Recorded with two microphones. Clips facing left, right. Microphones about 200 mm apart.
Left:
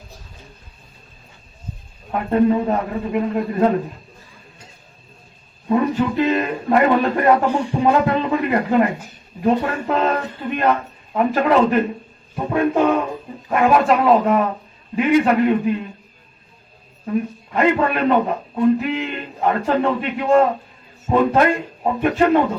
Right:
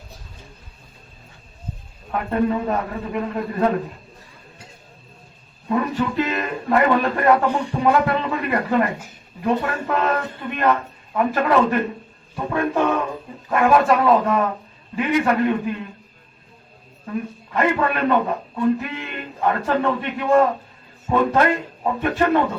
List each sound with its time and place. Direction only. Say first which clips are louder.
2.1 s speech: left 4 dB; 20° left (ahead or behind)
5.6 s speech: left 4 dB; 25° left (ahead or behind)
17.1 s a man's voice: left 5 dB; 20° left (ahead or behind)